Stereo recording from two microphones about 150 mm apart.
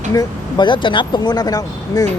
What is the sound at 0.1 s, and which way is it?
Speech, 25° left (ahead or behind).